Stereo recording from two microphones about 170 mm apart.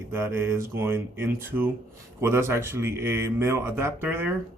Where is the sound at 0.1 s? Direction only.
10° right (ahead or behind).